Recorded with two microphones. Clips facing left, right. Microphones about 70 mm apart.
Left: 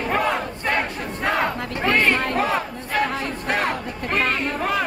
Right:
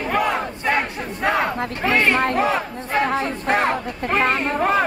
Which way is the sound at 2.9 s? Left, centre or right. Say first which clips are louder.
Right 3 dB; right.